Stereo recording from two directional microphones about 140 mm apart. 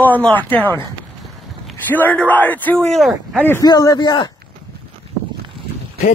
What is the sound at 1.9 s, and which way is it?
Speech, 10° left (ahead or behind).